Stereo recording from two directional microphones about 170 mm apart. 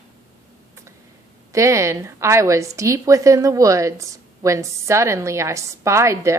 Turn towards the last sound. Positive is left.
turn(degrees=-15)  # may be behind; listen again after turning